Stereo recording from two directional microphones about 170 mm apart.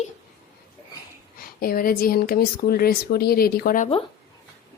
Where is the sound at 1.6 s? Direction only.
60° left (ahead or behind).